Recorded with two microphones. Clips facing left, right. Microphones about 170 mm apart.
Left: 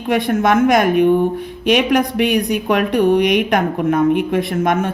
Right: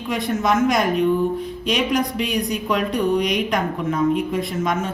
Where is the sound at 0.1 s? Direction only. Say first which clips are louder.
Left 6 dB; 65° left (ahead or behind).